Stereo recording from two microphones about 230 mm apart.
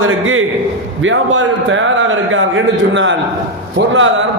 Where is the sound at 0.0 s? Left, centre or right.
Right.